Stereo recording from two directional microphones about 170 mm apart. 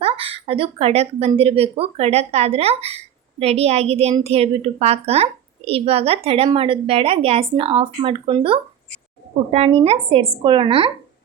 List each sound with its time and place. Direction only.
0.0 s a woman's voice: 35° right (ahead or behind)